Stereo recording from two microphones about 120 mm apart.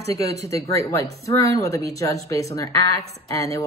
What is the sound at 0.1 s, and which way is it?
Speech, 25° left (ahead or behind).